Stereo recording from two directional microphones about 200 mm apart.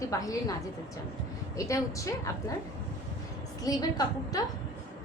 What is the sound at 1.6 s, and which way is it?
Speech, 15° left (ahead or behind).